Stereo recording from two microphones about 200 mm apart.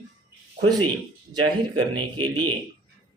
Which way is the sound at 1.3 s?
25° right (ahead or behind).